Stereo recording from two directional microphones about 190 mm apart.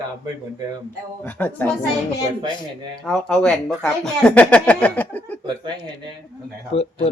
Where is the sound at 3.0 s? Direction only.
5° left (ahead or behind).